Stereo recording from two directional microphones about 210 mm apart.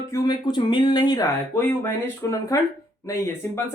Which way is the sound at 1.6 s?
10° left (ahead or behind).